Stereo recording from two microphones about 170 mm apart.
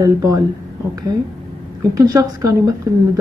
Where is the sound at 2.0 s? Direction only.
20° right (ahead or behind).